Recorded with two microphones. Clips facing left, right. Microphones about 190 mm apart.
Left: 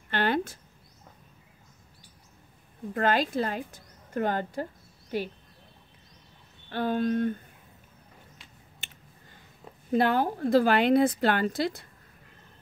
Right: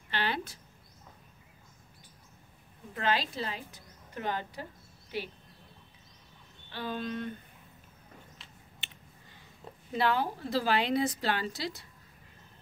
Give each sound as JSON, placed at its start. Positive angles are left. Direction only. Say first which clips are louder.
{"t": 0.1, "sound": "a woman's voice", "louder": "left 7 dB", "side_deg": 50}
{"t": 2.9, "sound": "a woman's voice", "louder": "left 6 dB", "side_deg": 50}
{"t": 6.7, "sound": "a woman's voice", "louder": "left 9 dB", "side_deg": 50}
{"t": 8.8, "sound": "a sound", "louder": "left 2 dB", "side_deg": 45}
{"t": 9.8, "sound": "a woman's voice", "louder": "left 5 dB", "side_deg": 50}